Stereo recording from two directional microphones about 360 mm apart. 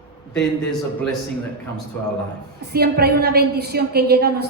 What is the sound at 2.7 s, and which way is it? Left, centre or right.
A woman's voice, right.